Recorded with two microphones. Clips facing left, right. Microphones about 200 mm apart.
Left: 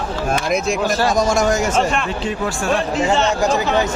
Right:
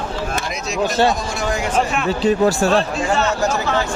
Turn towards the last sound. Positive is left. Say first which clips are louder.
# left 2 dB
turn(degrees=15)  # may be behind; listen again after turning